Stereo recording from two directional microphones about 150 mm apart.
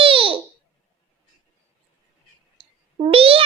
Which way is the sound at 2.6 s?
35° right (ahead or behind).